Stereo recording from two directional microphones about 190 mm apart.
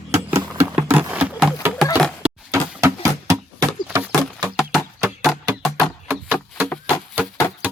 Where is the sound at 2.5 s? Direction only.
15° right (ahead or behind).